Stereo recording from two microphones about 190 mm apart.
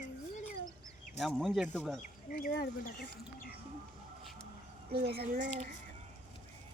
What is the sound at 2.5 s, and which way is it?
Speech, 50° left (ahead or behind).